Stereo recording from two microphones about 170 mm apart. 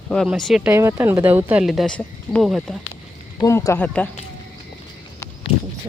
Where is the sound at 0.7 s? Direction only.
15° right (ahead or behind).